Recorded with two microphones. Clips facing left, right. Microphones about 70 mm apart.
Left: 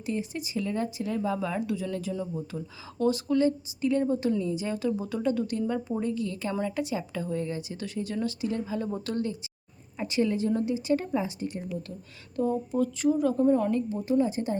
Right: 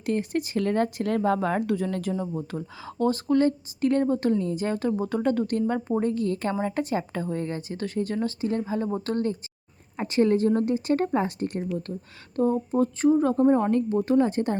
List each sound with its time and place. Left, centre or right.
0.0 s a woman's voice: right
12.4 s speech: right